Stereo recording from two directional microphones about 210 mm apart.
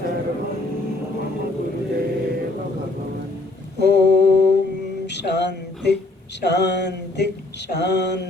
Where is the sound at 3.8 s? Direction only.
55° left (ahead or behind).